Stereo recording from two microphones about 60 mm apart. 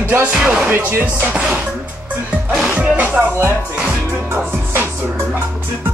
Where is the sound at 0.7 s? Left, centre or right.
Right.